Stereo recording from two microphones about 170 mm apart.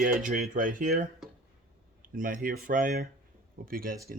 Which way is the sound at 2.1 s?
55° right (ahead or behind).